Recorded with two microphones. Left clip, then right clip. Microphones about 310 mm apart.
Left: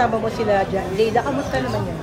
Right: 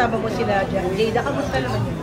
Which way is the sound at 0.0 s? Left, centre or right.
Left.